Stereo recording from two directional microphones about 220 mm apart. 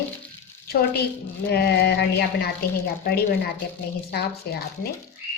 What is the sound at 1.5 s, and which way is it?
Speech, 45° left (ahead or behind).